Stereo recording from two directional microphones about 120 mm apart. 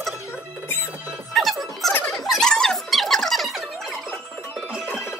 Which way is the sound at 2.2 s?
Centre (ahead or behind).